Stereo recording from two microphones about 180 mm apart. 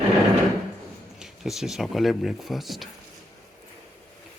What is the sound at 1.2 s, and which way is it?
Speech, centre (ahead or behind).